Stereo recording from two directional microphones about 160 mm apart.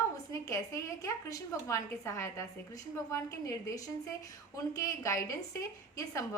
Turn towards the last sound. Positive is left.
turn(degrees=20)  # may be behind; listen again after turning